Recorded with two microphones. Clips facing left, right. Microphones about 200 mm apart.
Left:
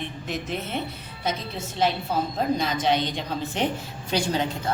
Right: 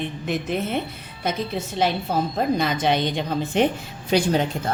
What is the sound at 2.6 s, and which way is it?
Speech, 60° right (ahead or behind).